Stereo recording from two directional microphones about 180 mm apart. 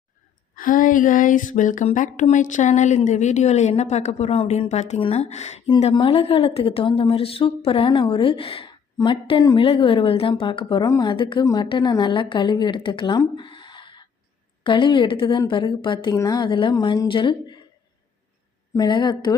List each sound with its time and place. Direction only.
0.5 s speech: 50° left (ahead or behind)
5.7 s speech: 25° left (ahead or behind)
18.7 s speech: 25° left (ahead or behind)